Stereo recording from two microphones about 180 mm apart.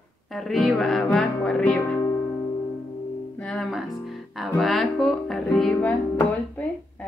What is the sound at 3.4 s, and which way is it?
Speech, centre (ahead or behind).